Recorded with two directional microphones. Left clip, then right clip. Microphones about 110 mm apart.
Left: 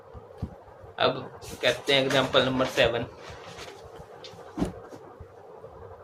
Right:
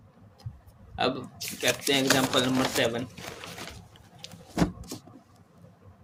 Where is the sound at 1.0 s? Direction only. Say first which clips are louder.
Left 3 dB; 70° right (ahead or behind).